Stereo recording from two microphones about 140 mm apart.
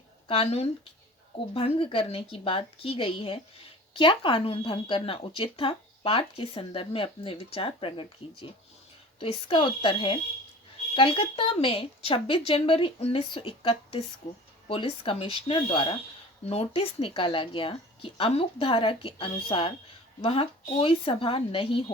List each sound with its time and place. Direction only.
0.3 s speech: 45° left (ahead or behind)